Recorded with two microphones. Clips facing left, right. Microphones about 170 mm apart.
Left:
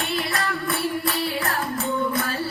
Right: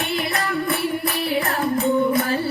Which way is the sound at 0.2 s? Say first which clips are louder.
Right 2 dB; 20° right (ahead or behind).